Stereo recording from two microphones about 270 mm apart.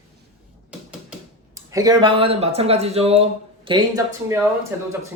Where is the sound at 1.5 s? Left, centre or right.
Centre.